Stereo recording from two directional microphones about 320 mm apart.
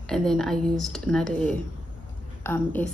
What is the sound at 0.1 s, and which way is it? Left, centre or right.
A woman's voice, centre.